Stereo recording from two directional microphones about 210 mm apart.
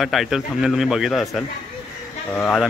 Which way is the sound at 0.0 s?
Centre (ahead or behind).